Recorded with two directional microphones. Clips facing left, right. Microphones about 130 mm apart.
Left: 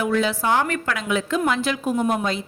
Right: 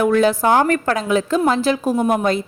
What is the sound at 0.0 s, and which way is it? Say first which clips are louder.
A woman's voice: right 6 dB; 50° right (ahead or behind).